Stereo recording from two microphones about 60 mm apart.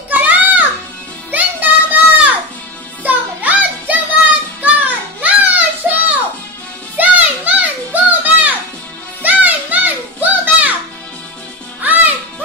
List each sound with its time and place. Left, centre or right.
0.1 s music: right
1.3 s a sound: right
3.0 s music: right
11.8 s music: right